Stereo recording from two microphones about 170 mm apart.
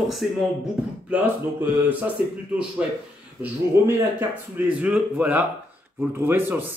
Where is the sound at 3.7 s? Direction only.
15° right (ahead or behind).